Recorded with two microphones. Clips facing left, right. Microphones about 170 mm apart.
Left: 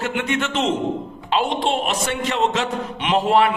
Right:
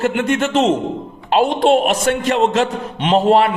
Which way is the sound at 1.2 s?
50° right (ahead or behind).